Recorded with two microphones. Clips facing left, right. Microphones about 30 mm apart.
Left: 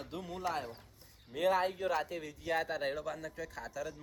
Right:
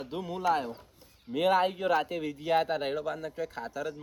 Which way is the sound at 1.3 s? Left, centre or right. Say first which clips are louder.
Right 5 dB; right.